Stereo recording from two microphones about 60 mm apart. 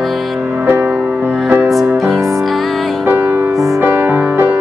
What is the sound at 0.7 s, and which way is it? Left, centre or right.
Music, right.